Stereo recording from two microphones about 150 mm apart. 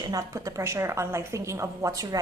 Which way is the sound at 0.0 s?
25° right (ahead or behind).